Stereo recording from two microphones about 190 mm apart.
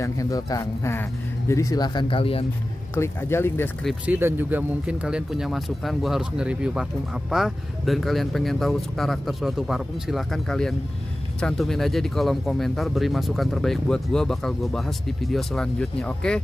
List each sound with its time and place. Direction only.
0.0 s a man's voice: 15° left (ahead or behind)
3.0 s a man's voice: 15° left (ahead or behind)
3.8 s speech: 10° right (ahead or behind)